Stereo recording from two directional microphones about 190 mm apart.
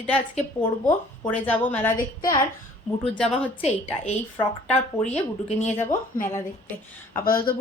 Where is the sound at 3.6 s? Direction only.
35° left (ahead or behind).